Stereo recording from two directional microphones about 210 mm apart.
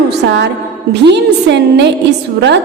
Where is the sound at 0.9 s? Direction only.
55° right (ahead or behind).